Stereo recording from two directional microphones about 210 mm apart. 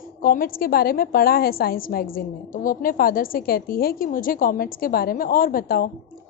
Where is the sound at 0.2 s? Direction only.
40° left (ahead or behind).